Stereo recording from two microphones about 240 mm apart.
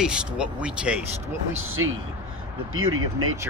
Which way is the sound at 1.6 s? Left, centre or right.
Right.